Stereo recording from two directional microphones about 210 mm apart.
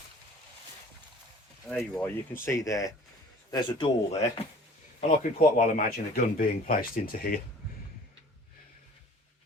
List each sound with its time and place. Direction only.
1.7 s speech: 10° left (ahead or behind); by 4.3 s 25° left (ahead or behind)
4.9 s speech: 40° left (ahead or behind)